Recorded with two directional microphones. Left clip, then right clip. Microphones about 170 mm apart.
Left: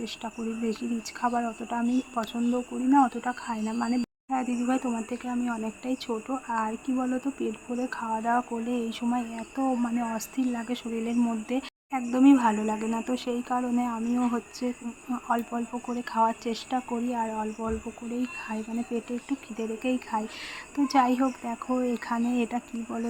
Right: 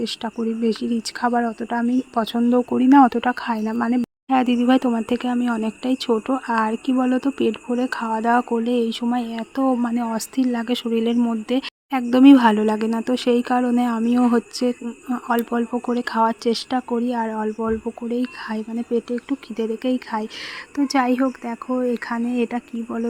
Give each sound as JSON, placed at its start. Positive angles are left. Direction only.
{"t": 0.0, "sound": "speech", "side_deg": -35}